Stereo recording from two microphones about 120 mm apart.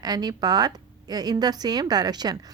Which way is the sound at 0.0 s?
35° right (ahead or behind).